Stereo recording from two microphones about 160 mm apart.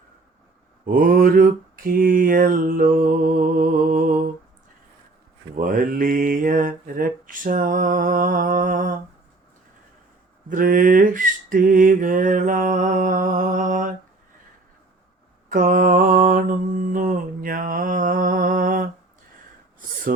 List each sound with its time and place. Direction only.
0.9 s mantra: 60° right (ahead or behind)
5.5 s mantra: 60° right (ahead or behind)
10.5 s a sound: 60° right (ahead or behind)
15.4 s mantra: 60° right (ahead or behind)